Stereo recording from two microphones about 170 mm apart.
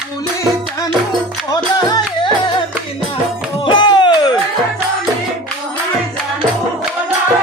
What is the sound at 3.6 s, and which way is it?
Music, 25° left (ahead or behind).